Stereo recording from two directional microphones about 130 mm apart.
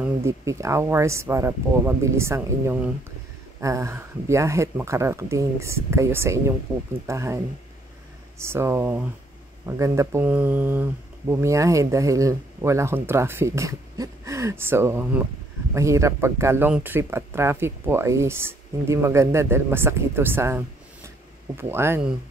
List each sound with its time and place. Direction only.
0.2 s speech: 25° right (ahead or behind)
8.4 s speech: 20° right (ahead or behind)